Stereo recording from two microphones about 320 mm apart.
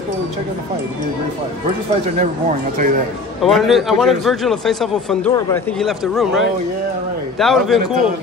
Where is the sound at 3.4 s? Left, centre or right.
Centre.